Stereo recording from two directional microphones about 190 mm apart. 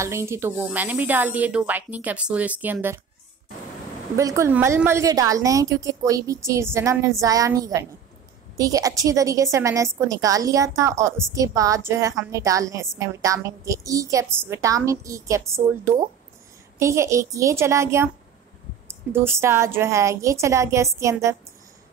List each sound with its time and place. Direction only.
0.0 s a woman's voice: 15° right (ahead or behind)
4.2 s a woman's voice: 15° right (ahead or behind)
19.1 s a woman's voice: 15° right (ahead or behind)